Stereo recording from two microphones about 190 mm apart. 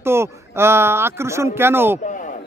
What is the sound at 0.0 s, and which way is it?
Speech, 15° right (ahead or behind).